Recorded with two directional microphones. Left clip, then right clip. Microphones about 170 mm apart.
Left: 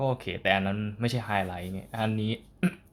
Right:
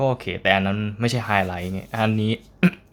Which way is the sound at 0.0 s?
10° right (ahead or behind).